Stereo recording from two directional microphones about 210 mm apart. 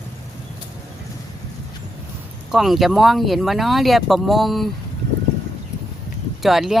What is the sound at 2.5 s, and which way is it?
Speech, centre (ahead or behind).